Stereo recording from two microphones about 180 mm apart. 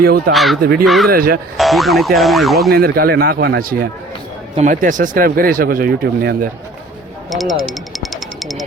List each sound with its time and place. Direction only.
0.0 s speech: 60° right (ahead or behind)
0.3 s speech: centre (ahead or behind)
0.6 s speech: 55° right (ahead or behind)
0.9 s speech: centre (ahead or behind)
1.1 s speech: 55° right (ahead or behind)
1.5 s speech: centre (ahead or behind)
2.7 s speech: 55° right (ahead or behind)
7.3 s speech: centre (ahead or behind)
7.7 s music: centre (ahead or behind)